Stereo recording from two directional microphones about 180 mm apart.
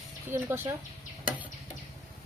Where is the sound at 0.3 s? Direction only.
15° right (ahead or behind).